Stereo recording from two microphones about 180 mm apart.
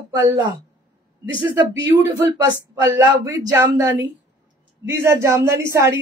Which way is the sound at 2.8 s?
15° right (ahead or behind).